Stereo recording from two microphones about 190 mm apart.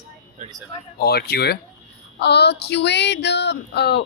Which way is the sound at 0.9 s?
55° left (ahead or behind).